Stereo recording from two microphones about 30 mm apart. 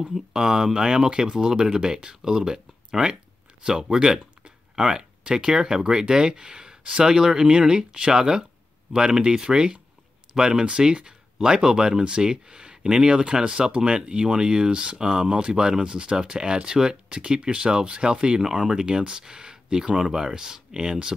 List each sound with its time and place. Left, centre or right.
0.1 s speech: centre
17.2 s speech: right